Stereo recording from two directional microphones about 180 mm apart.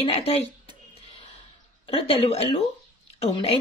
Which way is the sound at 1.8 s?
35° left (ahead or behind).